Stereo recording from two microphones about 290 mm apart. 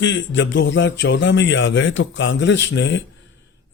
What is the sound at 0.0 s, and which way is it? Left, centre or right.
A man's voice, left.